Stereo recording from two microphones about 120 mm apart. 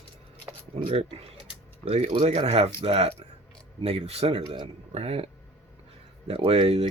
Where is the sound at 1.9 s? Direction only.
60° right (ahead or behind).